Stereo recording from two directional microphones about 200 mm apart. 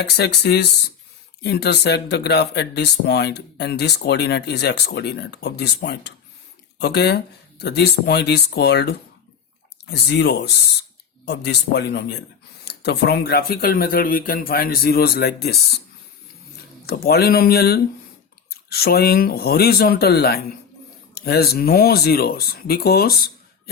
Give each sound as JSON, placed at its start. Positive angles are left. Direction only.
{"t": 0.0, "sound": "speech", "side_deg": 55}
{"t": 16.8, "sound": "speech", "side_deg": 50}